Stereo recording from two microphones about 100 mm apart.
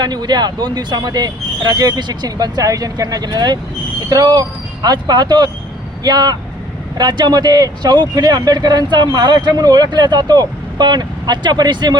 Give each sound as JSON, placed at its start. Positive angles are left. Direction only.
{"t": 0.0, "sound": "speech", "side_deg": -45}